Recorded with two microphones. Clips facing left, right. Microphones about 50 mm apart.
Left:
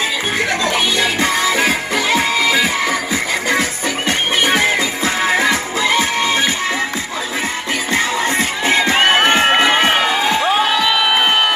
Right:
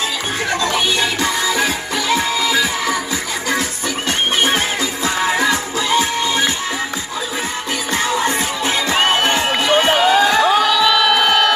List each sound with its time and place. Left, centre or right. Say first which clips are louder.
0.7 s music: left 1 dB; left
4.5 s music: left 3 dB; left
7.9 s music: even; left